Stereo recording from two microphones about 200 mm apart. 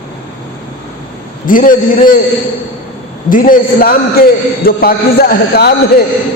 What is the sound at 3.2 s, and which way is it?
A woman's voice, 45° left (ahead or behind).